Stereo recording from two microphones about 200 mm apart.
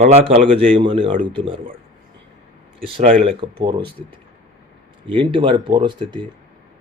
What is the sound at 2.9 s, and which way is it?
Speech, 35° right (ahead or behind).